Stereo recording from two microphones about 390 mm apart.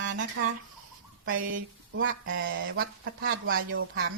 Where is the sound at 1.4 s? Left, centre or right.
Right.